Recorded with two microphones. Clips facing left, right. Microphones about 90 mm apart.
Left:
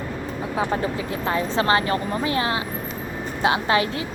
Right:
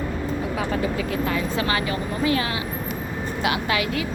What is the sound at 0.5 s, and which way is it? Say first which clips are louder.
Speech: left 4 dB; 30° left (ahead or behind).